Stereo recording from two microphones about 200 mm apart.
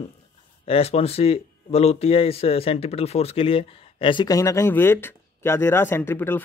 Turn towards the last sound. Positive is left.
turn(degrees=10)  # may be behind; listen again after turning